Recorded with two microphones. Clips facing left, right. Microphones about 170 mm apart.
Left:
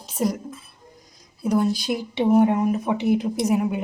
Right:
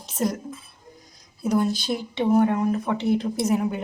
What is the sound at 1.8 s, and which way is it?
Speech, 15° left (ahead or behind).